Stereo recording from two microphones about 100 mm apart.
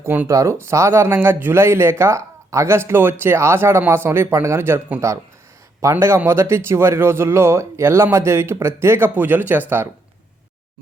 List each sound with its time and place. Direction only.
0.0 s speech: 20° right (ahead or behind)
0.3 s speech: 30° right (ahead or behind)